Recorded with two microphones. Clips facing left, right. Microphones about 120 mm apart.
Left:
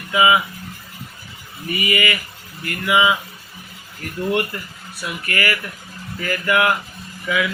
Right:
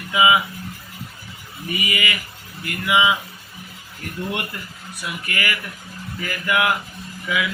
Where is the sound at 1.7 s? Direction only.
20° right (ahead or behind).